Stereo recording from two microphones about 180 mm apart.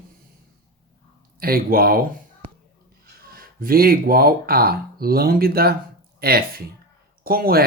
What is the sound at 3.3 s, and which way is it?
Speech, 55° right (ahead or behind).